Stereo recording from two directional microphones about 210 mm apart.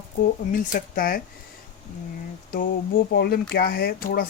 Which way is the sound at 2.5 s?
45° left (ahead or behind).